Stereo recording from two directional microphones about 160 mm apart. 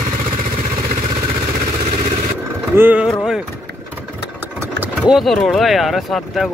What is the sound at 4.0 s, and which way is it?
Vehicle, 15° right (ahead or behind).